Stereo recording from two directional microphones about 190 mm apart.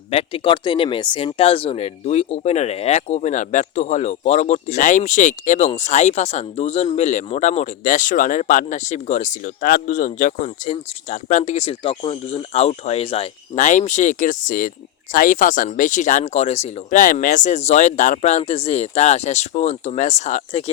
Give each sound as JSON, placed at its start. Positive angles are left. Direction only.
{"t": 0.1, "sound": "speech", "side_deg": 30}